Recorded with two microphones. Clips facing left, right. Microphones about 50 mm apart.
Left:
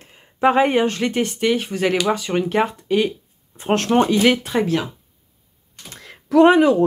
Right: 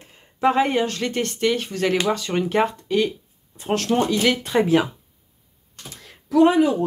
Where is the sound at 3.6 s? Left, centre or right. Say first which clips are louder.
Left 4 dB; left.